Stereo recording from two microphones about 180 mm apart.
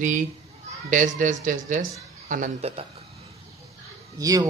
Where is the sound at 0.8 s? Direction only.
45° right (ahead or behind).